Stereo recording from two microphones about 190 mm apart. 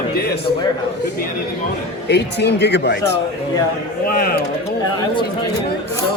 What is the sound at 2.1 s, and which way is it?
Speech, 60° left (ahead or behind).